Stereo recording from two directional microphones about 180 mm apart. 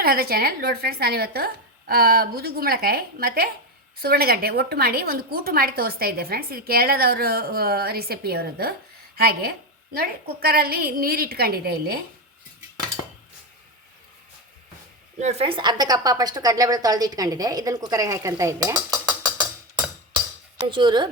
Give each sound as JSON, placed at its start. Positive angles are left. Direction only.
{"t": 0.0, "sound": "a woman's voice", "side_deg": -55}
{"t": 15.2, "sound": "a woman's voice", "side_deg": -35}